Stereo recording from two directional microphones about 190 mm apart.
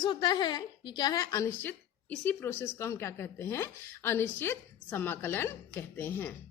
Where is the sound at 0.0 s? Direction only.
20° left (ahead or behind).